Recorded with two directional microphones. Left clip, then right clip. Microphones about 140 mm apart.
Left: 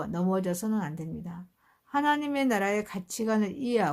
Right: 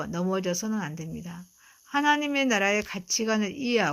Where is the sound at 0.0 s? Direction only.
10° right (ahead or behind).